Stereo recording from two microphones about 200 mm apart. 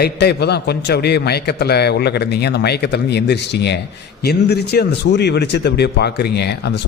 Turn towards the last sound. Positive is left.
turn(degrees=55)  # may be behind; listen again after turning